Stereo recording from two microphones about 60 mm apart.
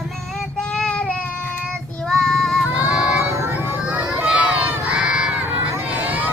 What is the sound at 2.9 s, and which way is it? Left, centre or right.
Child singing, centre.